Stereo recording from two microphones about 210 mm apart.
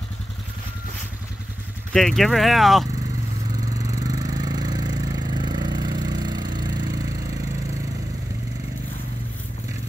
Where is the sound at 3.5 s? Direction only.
15° right (ahead or behind).